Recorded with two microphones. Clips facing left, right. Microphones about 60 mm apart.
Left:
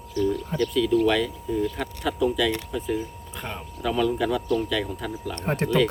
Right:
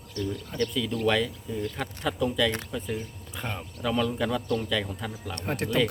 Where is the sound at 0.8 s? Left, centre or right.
Centre.